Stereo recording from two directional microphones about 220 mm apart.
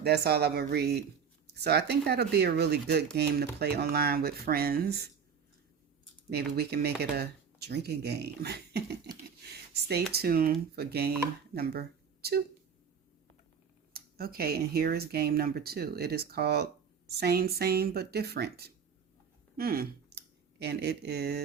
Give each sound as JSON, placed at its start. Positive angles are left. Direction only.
{"t": 0.0, "sound": "speech", "side_deg": -45}
{"t": 6.3, "sound": "speech", "side_deg": -45}
{"t": 10.1, "sound": "speech", "side_deg": -45}
{"t": 13.9, "sound": "speech", "side_deg": -45}